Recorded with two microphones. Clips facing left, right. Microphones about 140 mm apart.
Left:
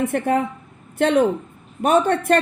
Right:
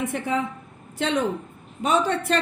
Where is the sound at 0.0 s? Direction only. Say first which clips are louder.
Left 6 dB; 55° left (ahead or behind).